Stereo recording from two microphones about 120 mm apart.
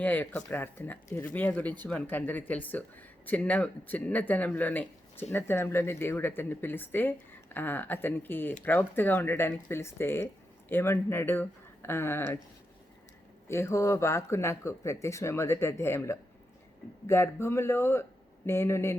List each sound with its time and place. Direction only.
0.0 s speech: 15° left (ahead or behind)
13.5 s speech: 20° left (ahead or behind)